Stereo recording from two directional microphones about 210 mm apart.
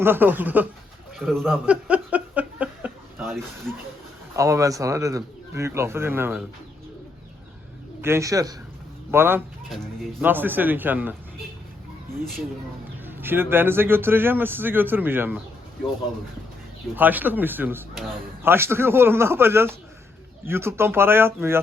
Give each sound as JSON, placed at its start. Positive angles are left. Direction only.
{"t": 0.0, "sound": "a man's voice", "side_deg": -10}
{"t": 1.2, "sound": "a sound", "side_deg": 0}
{"t": 3.7, "sound": "speech", "side_deg": 5}
{"t": 4.4, "sound": "a man's voice", "side_deg": -15}
{"t": 8.0, "sound": "a man's voice", "side_deg": -15}
{"t": 9.6, "sound": "a man's voice", "side_deg": 0}
{"t": 13.1, "sound": "a man's voice", "side_deg": -10}
{"t": 16.9, "sound": "a man's voice", "side_deg": -10}